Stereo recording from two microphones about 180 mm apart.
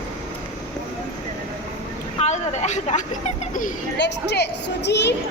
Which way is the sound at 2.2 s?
40° left (ahead or behind).